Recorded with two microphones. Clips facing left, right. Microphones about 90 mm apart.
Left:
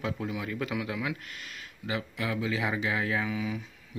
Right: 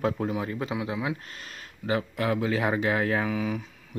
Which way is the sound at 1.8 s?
45° right (ahead or behind).